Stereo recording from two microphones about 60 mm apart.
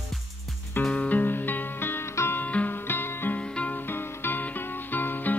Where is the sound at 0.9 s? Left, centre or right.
Left.